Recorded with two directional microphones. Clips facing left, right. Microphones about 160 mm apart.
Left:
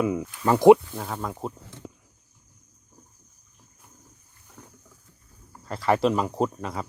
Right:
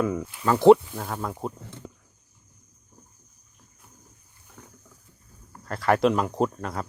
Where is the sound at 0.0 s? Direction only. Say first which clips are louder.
Left 1 dB; 10° left (ahead or behind).